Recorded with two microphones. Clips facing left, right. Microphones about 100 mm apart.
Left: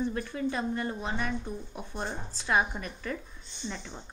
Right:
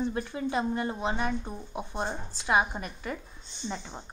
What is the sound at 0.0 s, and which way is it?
A woman's voice, 25° right (ahead or behind).